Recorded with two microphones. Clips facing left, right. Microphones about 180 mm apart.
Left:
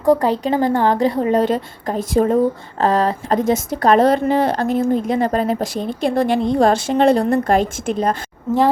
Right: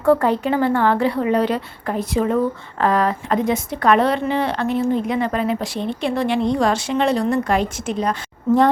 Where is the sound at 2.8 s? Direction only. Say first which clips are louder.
Left 2 dB; 30° left (ahead or behind); by 8.2 s 50° left (ahead or behind).